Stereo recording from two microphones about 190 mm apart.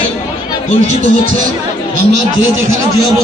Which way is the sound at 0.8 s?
40° right (ahead or behind).